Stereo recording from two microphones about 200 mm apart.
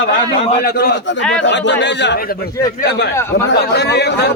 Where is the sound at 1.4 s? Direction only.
60° left (ahead or behind).